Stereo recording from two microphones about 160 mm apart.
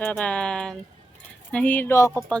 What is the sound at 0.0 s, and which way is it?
Speech, 10° left (ahead or behind).